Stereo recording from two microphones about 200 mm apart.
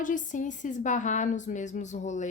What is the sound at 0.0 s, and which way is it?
Speech, 40° left (ahead or behind).